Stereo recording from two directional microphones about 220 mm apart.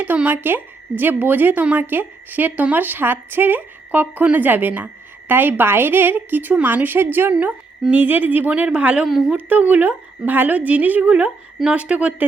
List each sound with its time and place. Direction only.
0.0 s a woman's voice: 5° right (ahead or behind)